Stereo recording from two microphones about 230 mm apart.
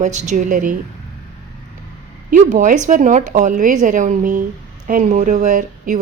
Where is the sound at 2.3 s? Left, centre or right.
Right.